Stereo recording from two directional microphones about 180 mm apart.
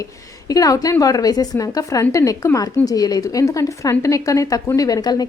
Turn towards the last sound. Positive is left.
turn(degrees=20)  # may be behind; listen again after turning